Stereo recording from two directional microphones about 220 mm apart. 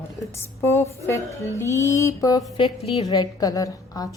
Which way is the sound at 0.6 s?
10° left (ahead or behind).